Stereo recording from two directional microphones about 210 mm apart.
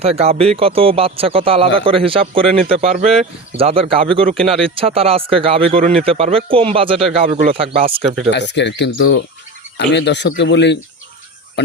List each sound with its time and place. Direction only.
0.0 s speech: 30° right (ahead or behind)
4.4 s speech: centre (ahead or behind)
4.6 s speech: 25° right (ahead or behind)
8.3 s speech: 55° left (ahead or behind)